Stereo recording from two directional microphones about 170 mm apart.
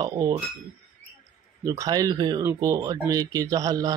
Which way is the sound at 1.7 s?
20° right (ahead or behind).